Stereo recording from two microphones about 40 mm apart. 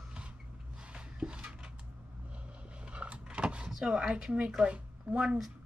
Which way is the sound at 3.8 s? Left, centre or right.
Right.